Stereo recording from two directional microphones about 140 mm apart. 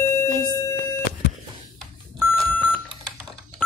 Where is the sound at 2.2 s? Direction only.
15° left (ahead or behind).